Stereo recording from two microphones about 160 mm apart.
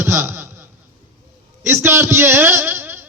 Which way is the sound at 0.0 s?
15° right (ahead or behind).